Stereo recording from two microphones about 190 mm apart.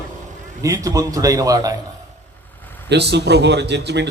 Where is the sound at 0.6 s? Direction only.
15° right (ahead or behind).